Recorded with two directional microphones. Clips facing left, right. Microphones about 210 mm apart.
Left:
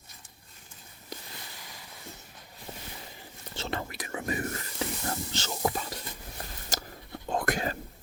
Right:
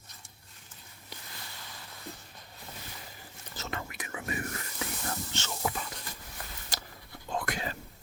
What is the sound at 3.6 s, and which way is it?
Whispering, 35° left (ahead or behind).